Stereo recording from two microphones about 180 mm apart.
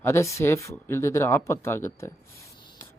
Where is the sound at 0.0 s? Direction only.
15° left (ahead or behind).